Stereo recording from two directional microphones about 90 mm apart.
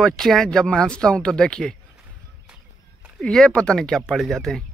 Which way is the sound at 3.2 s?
10° left (ahead or behind).